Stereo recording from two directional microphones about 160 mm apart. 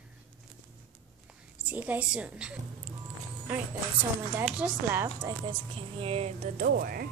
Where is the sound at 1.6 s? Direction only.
10° right (ahead or behind).